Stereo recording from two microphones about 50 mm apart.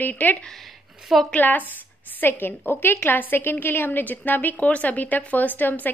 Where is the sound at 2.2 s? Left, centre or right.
Left.